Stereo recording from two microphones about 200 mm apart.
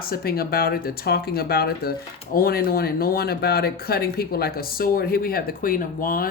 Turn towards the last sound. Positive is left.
turn(degrees=45)  # may be behind; listen again after turning